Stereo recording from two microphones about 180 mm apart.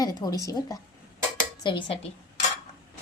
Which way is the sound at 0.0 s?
20° left (ahead or behind).